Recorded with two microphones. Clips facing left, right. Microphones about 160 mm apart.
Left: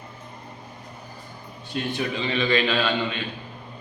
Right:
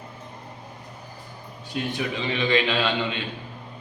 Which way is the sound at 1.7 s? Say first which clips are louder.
Left 1 dB; 15° right (ahead or behind).